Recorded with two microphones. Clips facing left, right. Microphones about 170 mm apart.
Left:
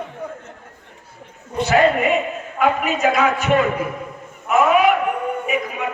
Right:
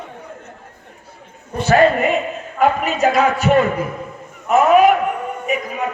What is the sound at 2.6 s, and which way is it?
Speech, 40° right (ahead or behind).